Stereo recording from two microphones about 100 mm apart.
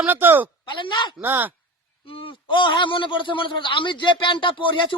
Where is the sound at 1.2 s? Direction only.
20° right (ahead or behind).